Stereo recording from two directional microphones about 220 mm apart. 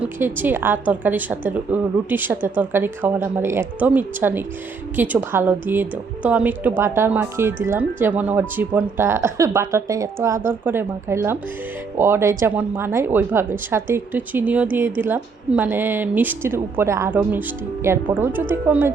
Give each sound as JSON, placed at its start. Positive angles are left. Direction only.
{"t": 0.0, "sound": "a woman's voice", "side_deg": -10}